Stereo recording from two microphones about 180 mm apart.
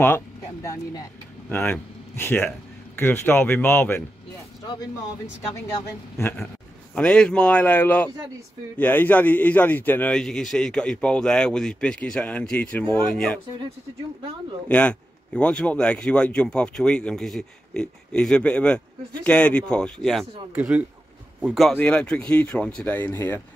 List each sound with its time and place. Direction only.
0.0 s a man's voice: 15° left (ahead or behind)
7.0 s a man's voice: 5° left (ahead or behind)
14.7 s speech: 5° left (ahead or behind)
20.5 s a man's voice: 10° right (ahead or behind); by 23.4 s 10° left (ahead or behind)